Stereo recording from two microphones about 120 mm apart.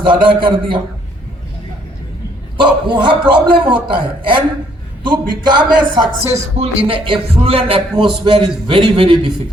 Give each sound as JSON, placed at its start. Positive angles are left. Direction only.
{"t": 0.1, "sound": "music", "side_deg": -40}
{"t": 2.6, "sound": "music", "side_deg": -40}
{"t": 5.0, "sound": "a man's voice", "side_deg": -40}
{"t": 6.6, "sound": "music", "side_deg": -50}